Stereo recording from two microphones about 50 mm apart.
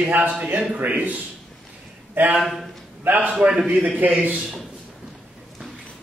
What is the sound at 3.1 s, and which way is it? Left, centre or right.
A man's voice, right.